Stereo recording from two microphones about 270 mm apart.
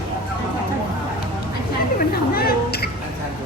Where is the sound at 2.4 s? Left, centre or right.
Left.